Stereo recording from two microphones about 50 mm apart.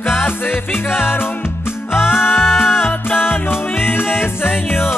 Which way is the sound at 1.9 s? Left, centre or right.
Left.